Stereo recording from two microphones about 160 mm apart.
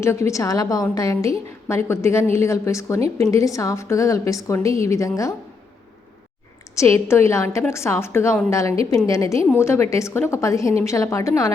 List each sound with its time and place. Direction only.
0.0 s a woman's voice: 20° left (ahead or behind)
6.7 s a woman's voice: 15° left (ahead or behind)